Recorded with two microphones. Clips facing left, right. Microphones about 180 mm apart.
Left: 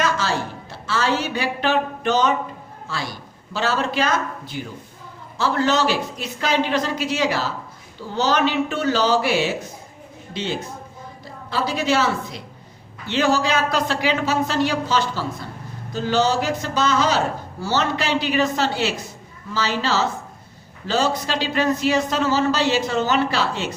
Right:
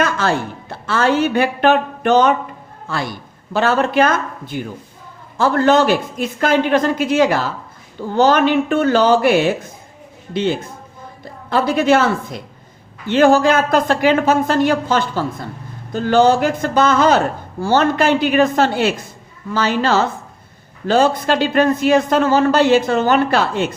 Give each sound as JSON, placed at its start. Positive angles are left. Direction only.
{"t": 0.0, "sound": "a woman's voice", "side_deg": -55}